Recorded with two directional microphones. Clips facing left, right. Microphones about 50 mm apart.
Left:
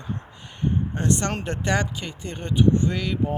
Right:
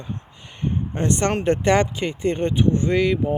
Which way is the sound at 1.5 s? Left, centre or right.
Right.